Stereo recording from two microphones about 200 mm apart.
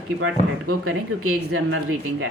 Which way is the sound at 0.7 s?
90° right.